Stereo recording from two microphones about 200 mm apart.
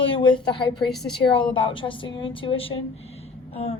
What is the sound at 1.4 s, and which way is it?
Speech, 25° left (ahead or behind).